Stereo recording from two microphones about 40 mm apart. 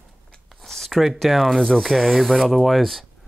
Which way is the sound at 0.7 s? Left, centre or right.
Centre.